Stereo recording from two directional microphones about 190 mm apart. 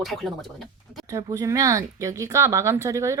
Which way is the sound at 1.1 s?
15° right (ahead or behind).